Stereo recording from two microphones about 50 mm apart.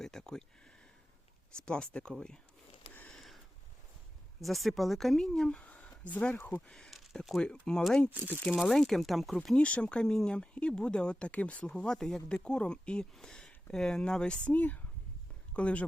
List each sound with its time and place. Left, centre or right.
0.0 s a sound: centre
1.6 s speech: centre
3.2 s a sound: centre
4.4 s a woman's voice: centre; by 6.2 s left
6.3 s speech: left
6.7 s a sound: centre
7.3 s speech: centre
8.1 s speech: right
8.4 s speech: centre
9.6 s speech: left
11.7 s speech: centre